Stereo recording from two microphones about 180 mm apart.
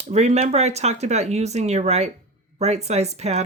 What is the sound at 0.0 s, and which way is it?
Speech, 35° right (ahead or behind).